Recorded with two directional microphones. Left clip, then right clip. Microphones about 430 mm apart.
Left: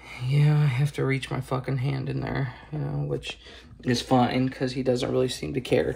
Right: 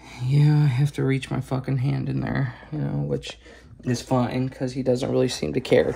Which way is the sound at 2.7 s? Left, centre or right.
Right.